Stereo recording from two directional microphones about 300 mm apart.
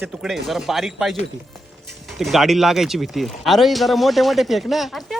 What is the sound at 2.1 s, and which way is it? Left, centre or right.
Speech, centre.